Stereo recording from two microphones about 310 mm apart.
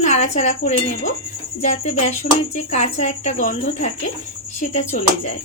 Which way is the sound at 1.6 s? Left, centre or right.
Left.